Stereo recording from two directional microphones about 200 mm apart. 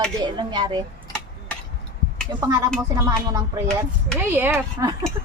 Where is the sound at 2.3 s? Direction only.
20° right (ahead or behind).